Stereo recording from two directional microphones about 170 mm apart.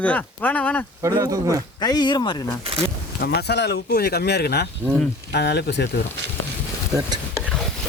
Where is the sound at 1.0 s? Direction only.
20° right (ahead or behind).